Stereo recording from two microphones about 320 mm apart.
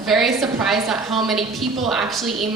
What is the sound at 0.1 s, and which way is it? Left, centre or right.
A woman's voice, centre.